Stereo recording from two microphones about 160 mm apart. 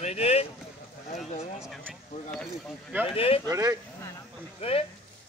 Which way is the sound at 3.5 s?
20° right (ahead or behind).